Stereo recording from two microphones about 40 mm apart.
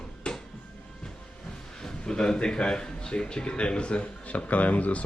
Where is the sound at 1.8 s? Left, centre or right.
Centre.